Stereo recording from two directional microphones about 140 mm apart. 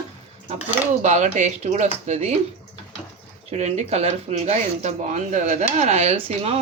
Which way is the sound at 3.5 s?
50° right (ahead or behind).